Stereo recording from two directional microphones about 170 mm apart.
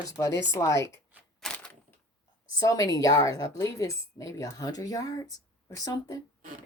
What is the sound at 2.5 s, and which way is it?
A woman's voice, 20° left (ahead or behind).